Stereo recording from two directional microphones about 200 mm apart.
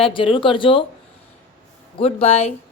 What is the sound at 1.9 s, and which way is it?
Speech, 30° left (ahead or behind).